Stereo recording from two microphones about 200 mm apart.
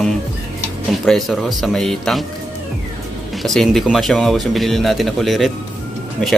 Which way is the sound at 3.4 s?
Centre (ahead or behind).